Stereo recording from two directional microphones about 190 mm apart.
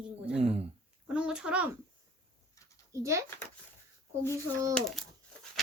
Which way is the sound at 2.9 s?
15° right (ahead or behind).